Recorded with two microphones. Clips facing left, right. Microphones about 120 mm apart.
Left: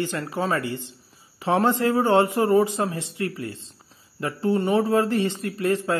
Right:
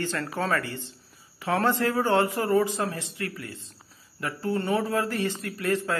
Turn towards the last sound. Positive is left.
turn(degrees=20)  # may be behind; listen again after turning